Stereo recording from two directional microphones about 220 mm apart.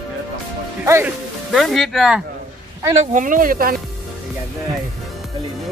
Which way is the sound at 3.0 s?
35° right (ahead or behind).